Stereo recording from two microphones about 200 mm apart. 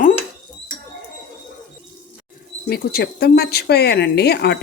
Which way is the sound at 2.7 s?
50° left (ahead or behind).